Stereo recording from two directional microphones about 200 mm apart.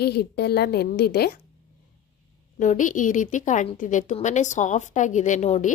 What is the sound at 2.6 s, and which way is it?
A woman's voice, 40° left (ahead or behind).